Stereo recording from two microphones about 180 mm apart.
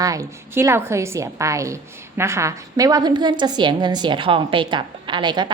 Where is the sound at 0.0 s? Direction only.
20° right (ahead or behind).